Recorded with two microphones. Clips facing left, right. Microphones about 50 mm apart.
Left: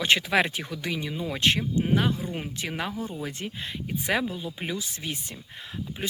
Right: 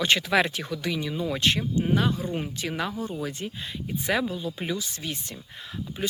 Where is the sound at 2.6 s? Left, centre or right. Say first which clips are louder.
Right 2 dB; left.